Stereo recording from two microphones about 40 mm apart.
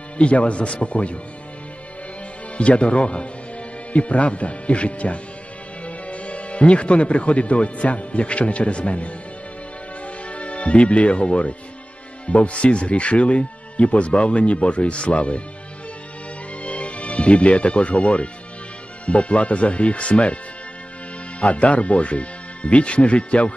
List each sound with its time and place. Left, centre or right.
0.2 s speech: left
2.5 s speech: left
10.0 s music: left
12.3 s speech: left
16.6 s speech: left
21.4 s speech: left